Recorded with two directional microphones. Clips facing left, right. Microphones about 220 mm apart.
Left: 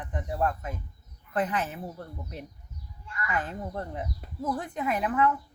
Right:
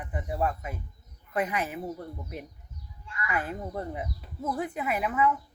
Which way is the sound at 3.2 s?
10° right (ahead or behind).